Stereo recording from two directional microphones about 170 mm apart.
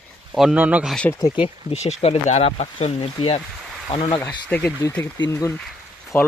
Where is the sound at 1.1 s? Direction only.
20° left (ahead or behind).